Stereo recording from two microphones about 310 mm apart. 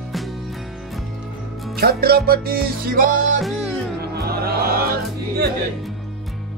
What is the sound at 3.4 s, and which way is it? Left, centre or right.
Music, centre.